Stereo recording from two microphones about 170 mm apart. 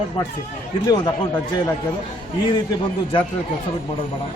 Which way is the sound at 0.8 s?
25° left (ahead or behind).